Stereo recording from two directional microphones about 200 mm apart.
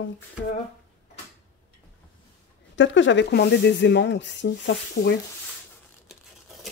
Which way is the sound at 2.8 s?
65° left (ahead or behind).